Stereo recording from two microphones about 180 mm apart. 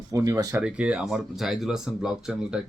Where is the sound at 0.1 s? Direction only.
20° right (ahead or behind).